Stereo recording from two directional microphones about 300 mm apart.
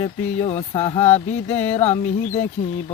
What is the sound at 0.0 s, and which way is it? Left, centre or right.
Mantra, left.